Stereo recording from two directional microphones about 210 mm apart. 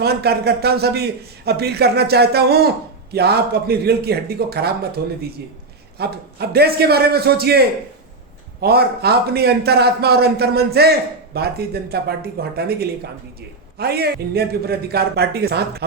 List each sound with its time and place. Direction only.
0.0 s a man's voice: 50° right (ahead or behind)
8.6 s a man's voice: 50° right (ahead or behind)